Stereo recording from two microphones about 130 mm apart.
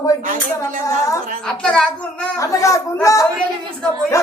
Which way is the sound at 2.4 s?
25° left (ahead or behind).